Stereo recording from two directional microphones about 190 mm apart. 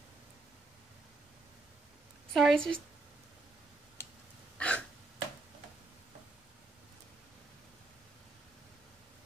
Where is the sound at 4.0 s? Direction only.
15° left (ahead or behind).